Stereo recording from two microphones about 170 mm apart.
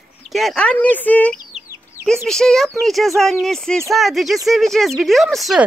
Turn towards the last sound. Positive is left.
turn(degrees=0)  # may be behind; listen again after turning